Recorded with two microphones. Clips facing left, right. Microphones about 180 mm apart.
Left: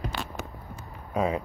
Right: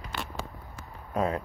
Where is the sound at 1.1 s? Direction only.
5° left (ahead or behind).